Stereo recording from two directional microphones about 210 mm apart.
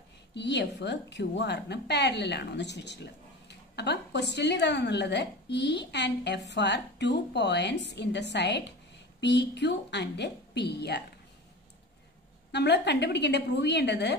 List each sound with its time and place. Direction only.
0.3 s a woman's voice: 55° left (ahead or behind)
12.5 s a woman's voice: 55° left (ahead or behind)